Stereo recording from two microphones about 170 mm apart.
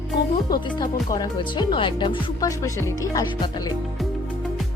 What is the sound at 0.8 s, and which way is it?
Speech, 25° left (ahead or behind).